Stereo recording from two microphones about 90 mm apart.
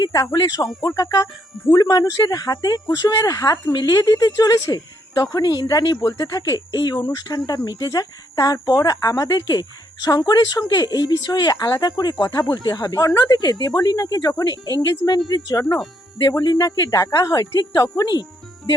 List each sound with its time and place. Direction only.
0.0 s a woman's voice: 40° left (ahead or behind)